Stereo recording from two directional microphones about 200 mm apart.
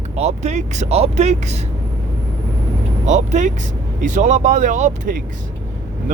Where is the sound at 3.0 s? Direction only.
35° right (ahead or behind).